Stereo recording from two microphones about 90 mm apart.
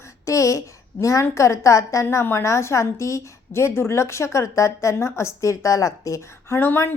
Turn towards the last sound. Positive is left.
turn(degrees=25)  # may be behind; listen again after turning